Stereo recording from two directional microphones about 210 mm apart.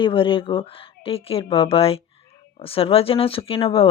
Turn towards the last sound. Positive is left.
turn(degrees=25)  # may be behind; listen again after turning